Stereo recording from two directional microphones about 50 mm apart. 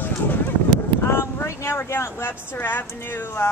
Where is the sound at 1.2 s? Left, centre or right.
Left.